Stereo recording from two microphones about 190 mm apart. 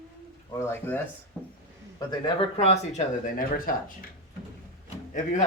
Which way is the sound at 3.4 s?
50° left (ahead or behind).